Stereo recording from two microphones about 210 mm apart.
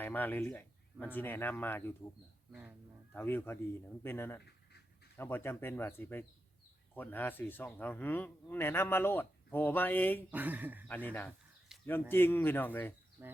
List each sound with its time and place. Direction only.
0.0 s a man's voice: 10° left (ahead or behind)
2.5 s speech: 5° right (ahead or behind)
3.1 s a man's voice: 10° left (ahead or behind)
10.3 s speech: 10° right (ahead or behind)
10.8 s a man's voice: 10° left (ahead or behind)
13.2 s speech: 10° right (ahead or behind)